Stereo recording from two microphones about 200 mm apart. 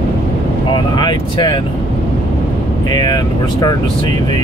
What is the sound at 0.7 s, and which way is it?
Speech, 20° left (ahead or behind).